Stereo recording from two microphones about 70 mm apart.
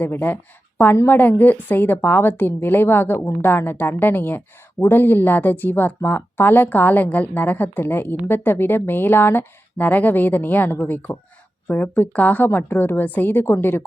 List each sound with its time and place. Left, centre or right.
0.0 s speech: left